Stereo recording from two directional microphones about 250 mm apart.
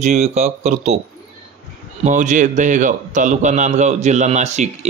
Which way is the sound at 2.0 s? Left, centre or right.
Right.